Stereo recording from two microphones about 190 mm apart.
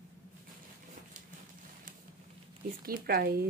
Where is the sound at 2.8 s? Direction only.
50° right (ahead or behind).